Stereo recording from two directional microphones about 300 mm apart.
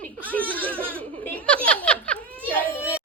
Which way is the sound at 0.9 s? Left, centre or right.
Centre.